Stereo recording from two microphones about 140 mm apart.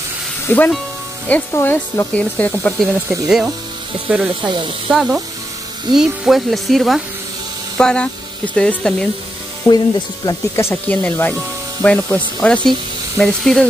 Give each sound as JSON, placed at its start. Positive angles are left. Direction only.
{"t": 0.5, "sound": "speech", "side_deg": 10}
{"t": 2.8, "sound": "speech", "side_deg": 0}
{"t": 9.7, "sound": "speech", "side_deg": 30}
{"t": 10.5, "sound": "speech", "side_deg": 15}